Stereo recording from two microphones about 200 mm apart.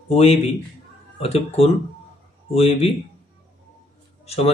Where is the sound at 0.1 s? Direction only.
30° left (ahead or behind).